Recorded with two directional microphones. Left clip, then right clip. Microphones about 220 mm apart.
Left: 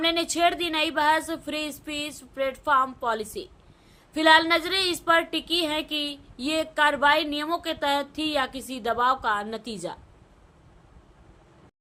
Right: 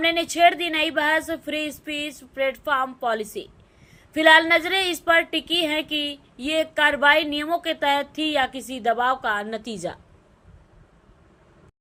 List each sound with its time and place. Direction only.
0.0 s a woman's voice: 10° right (ahead or behind)